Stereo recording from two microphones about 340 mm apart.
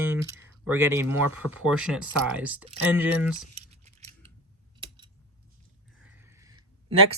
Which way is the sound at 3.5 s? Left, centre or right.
Centre.